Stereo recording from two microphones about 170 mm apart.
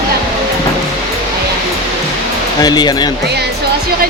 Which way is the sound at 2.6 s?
25° left (ahead or behind).